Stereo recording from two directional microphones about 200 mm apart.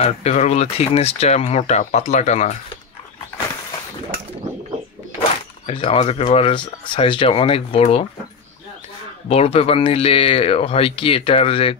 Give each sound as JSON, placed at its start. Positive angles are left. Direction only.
{"t": 0.0, "sound": "speech", "side_deg": 35}
{"t": 5.7, "sound": "speech", "side_deg": 30}
{"t": 9.3, "sound": "speech", "side_deg": 30}